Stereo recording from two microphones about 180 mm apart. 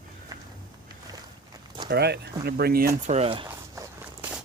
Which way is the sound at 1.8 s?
65° right (ahead or behind).